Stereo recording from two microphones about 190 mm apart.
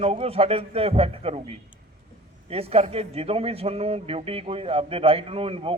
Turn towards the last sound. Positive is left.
turn(degrees=-30)  # may be behind; listen again after turning